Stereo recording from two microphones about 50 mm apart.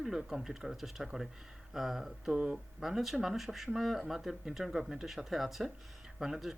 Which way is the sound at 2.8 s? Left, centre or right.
Centre.